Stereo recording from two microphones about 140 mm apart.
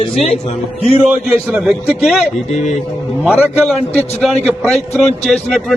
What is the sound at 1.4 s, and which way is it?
Speech, 5° right (ahead or behind).